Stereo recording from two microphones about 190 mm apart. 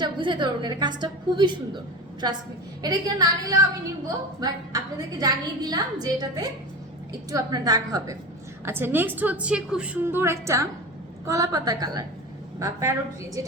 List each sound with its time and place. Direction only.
0.0 s a woman's voice: 25° right (ahead or behind)